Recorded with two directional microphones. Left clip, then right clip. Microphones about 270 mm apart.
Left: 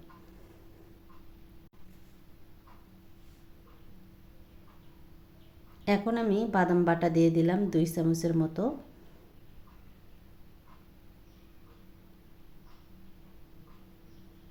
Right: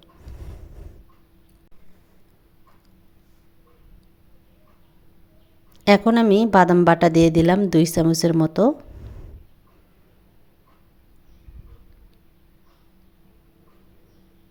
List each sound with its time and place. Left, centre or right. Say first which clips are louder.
5.8 s a woman's voice: right 13 dB; right